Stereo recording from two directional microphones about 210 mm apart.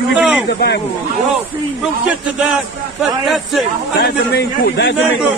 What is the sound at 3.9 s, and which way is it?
A man's voice, 50° left (ahead or behind).